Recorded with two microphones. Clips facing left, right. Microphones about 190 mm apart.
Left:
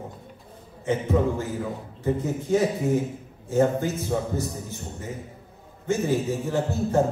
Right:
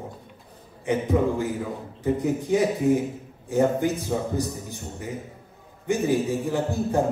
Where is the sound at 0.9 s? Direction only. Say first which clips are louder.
Right 1 dB; 15° right (ahead or behind).